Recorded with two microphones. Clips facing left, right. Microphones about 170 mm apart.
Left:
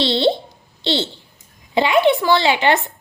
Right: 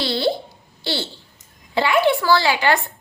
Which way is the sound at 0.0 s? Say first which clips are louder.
Left 4 dB; 25° left (ahead or behind).